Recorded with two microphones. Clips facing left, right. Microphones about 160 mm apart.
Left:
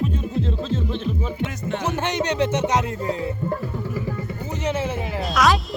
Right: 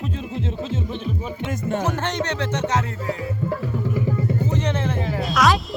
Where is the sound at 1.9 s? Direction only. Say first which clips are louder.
Left 1 dB; 10° left (ahead or behind).